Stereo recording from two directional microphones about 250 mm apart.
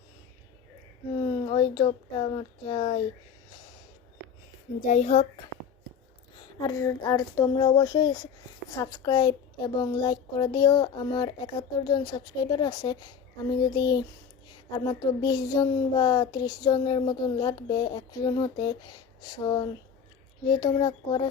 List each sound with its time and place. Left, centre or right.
1.2 s speech: centre
4.9 s speech: left
6.7 s a woman's voice: centre
15.2 s a woman's voice: centre